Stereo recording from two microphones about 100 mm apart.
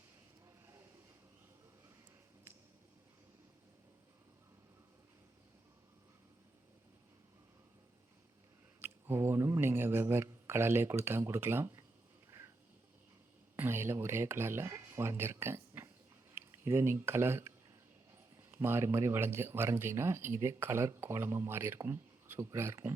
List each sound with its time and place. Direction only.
8.8 s speech: 25° right (ahead or behind)
13.6 s speech: 25° right (ahead or behind)
18.5 s speech: 25° right (ahead or behind)